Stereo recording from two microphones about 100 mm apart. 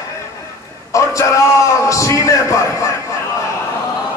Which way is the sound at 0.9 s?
30° left (ahead or behind).